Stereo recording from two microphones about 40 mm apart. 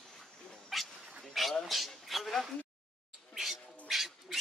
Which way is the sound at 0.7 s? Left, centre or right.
Centre.